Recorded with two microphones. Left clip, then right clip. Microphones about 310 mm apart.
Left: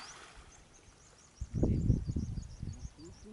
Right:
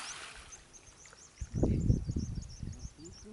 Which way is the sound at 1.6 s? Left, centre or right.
Centre.